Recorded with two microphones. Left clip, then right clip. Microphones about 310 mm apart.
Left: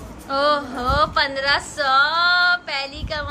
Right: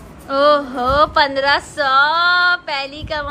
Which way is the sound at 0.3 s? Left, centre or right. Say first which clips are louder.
Right 6 dB; centre.